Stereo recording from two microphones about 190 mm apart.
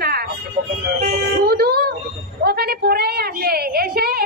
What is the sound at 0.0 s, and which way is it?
Music, 55° right (ahead or behind).